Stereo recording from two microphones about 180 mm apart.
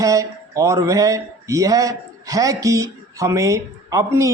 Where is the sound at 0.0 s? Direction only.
20° right (ahead or behind).